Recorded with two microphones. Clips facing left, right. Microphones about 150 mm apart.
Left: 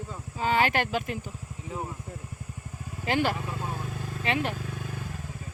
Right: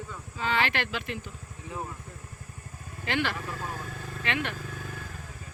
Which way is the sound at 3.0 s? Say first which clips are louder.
Left 3 dB; 40° left (ahead or behind).